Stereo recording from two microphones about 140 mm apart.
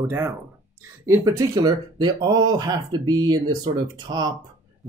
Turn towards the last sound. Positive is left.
turn(degrees=-30)  # may be behind; listen again after turning